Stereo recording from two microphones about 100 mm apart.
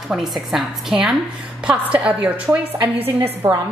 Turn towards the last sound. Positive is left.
turn(degrees=-20)  # may be behind; listen again after turning